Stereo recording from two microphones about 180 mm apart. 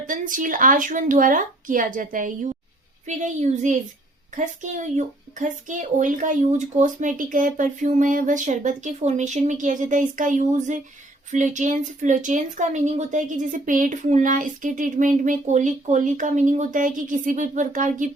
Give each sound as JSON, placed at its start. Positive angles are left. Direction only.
{"t": 0.1, "sound": "a woman's voice", "side_deg": -50}